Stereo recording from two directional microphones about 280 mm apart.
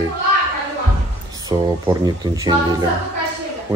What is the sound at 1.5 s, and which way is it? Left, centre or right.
Speech, centre.